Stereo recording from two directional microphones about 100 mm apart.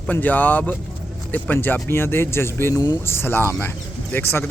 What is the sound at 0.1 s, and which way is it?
Speech, 15° left (ahead or behind).